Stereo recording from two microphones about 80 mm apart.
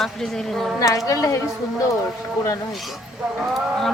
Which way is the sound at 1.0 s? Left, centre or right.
Left.